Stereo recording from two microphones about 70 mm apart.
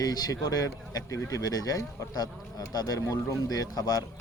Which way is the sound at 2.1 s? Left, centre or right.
Left.